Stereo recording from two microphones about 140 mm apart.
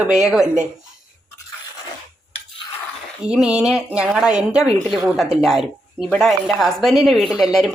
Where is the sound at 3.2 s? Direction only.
5° right (ahead or behind).